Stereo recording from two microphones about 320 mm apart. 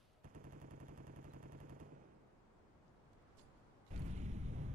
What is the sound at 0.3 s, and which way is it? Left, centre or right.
Machine gun, right.